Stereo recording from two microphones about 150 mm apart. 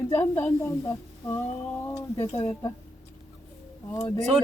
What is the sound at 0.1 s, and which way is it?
Speech, 15° left (ahead or behind).